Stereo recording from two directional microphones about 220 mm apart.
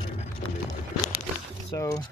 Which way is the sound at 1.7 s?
15° left (ahead or behind).